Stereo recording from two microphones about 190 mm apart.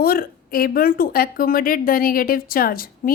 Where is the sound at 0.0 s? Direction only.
50° left (ahead or behind).